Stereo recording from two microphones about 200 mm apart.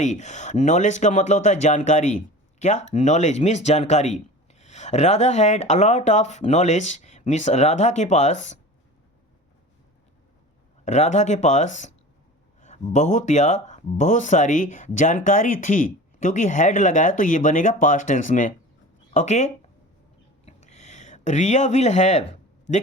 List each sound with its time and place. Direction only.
0.0 s speech: 35° left (ahead or behind)
10.8 s speech: 35° left (ahead or behind)
20.4 s a sound: 35° left (ahead or behind)